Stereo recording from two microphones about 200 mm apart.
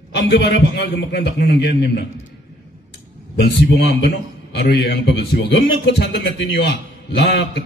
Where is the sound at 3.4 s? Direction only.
60° left (ahead or behind).